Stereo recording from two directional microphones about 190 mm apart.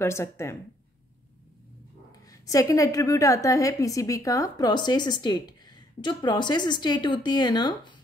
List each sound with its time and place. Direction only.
0.0 s speech: 15° left (ahead or behind)
2.2 s a woman's voice: 20° left (ahead or behind)